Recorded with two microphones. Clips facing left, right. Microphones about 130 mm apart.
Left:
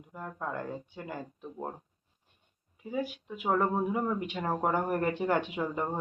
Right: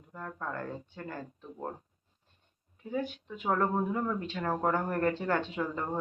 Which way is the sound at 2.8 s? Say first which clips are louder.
Even; 10° left (ahead or behind).